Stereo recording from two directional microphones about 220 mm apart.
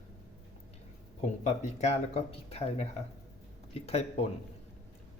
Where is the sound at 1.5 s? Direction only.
30° left (ahead or behind).